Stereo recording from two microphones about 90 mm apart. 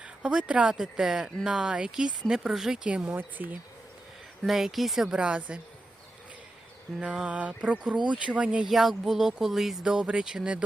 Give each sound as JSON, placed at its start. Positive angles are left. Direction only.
{"t": 0.0, "sound": "speech", "side_deg": -10}
{"t": 4.4, "sound": "speech", "side_deg": -5}
{"t": 7.0, "sound": "speech", "side_deg": -10}